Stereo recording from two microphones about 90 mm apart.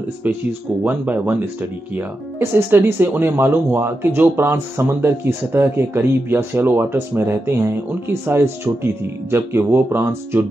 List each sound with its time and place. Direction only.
0.2 s speech: 20° right (ahead or behind)